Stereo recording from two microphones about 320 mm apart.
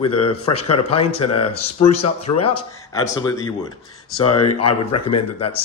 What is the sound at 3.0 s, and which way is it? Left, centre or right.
Speech, centre.